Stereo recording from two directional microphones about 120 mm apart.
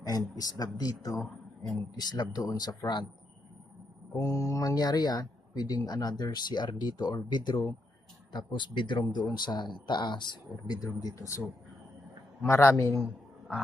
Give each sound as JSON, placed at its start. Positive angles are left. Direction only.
{"t": 0.0, "sound": "speech", "side_deg": 30}
{"t": 1.1, "sound": "speech", "side_deg": 0}
{"t": 2.0, "sound": "speech", "side_deg": 35}
{"t": 4.1, "sound": "speech", "side_deg": 25}